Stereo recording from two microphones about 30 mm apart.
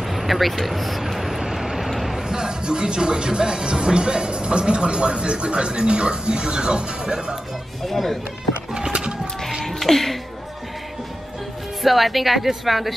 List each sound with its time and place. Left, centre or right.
0.0 s a sound: centre
1.4 s vehicle: centre
1.9 s a sound: centre
2.1 s speech: right
7.8 s a woman's voice: centre
8.9 s music: right
9.7 s music: centre
11.8 s a woman's voice: centre